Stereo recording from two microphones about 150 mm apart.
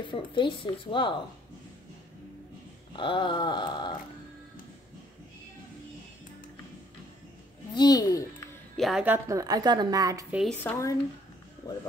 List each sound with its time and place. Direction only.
0.1 s speech: 35° left (ahead or behind)
3.0 s speech: 35° left (ahead or behind)
7.7 s a child's voice: 25° left (ahead or behind)
8.7 s speech: centre (ahead or behind)
9.0 s a woman's voice: 15° right (ahead or behind)
10.6 s speech: 15° left (ahead or behind)